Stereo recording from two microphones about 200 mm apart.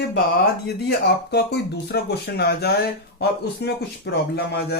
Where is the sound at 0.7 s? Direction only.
55° left (ahead or behind).